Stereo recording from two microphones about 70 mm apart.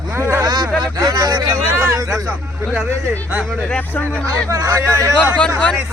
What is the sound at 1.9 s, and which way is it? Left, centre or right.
Speech, right.